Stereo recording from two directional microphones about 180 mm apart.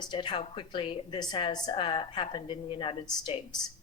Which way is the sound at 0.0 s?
25° left (ahead or behind).